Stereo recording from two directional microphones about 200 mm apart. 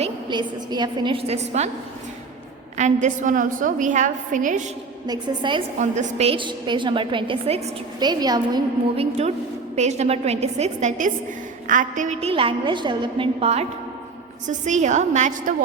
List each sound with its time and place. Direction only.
0.0 s a woman's voice: 25° right (ahead or behind)
2.7 s a woman's voice: 35° right (ahead or behind)
5.0 s a woman's voice: 20° right (ahead or behind)
5.8 s a woman's voice: 35° right (ahead or behind)